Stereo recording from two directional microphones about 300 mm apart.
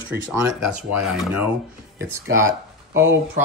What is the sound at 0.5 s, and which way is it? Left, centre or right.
Speech, centre.